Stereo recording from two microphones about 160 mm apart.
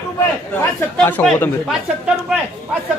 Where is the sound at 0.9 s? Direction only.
10° left (ahead or behind).